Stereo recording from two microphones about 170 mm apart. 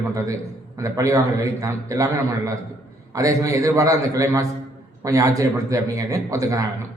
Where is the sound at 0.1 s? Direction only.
20° right (ahead or behind).